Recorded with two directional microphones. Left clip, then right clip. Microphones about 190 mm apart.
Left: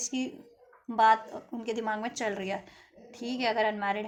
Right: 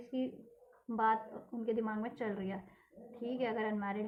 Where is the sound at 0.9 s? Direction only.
35° left (ahead or behind).